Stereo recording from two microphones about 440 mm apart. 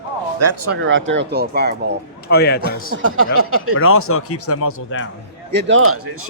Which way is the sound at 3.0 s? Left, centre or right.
Right.